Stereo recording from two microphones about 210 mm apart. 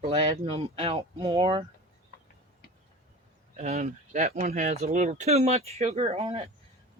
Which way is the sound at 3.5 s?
35° right (ahead or behind).